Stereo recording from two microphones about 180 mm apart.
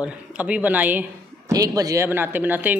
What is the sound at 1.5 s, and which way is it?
Speech, 20° right (ahead or behind).